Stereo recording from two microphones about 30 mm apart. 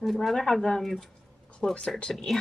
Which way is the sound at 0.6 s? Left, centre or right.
Centre.